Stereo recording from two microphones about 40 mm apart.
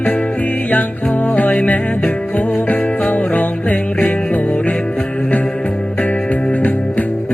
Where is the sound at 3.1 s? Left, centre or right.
Left.